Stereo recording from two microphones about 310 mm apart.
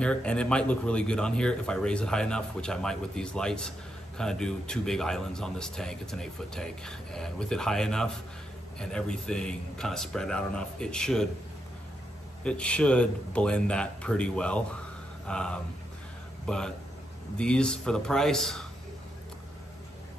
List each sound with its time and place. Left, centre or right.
0.0 s speech: centre
12.4 s a man's voice: centre